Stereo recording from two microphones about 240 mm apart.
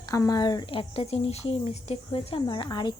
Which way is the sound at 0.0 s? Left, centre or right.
Centre.